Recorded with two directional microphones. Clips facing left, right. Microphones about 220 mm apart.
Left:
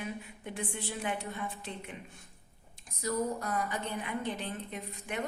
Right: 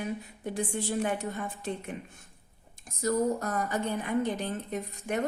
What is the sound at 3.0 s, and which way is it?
A woman's voice, 45° right (ahead or behind).